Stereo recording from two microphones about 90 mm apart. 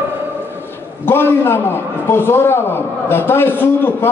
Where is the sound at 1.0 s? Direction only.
25° left (ahead or behind).